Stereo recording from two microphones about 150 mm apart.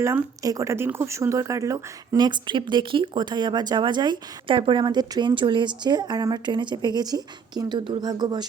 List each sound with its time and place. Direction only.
0.0 s speech: 20° right (ahead or behind)